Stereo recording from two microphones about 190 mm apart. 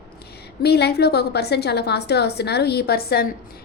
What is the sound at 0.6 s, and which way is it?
A woman's voice, 60° left (ahead or behind).